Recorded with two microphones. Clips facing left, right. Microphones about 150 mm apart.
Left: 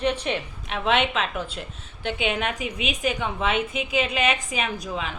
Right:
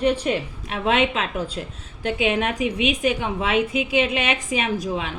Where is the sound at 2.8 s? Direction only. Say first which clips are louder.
Right 5 dB; 30° left (ahead or behind).